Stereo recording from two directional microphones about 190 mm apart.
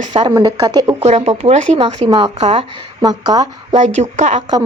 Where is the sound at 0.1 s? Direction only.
25° right (ahead or behind).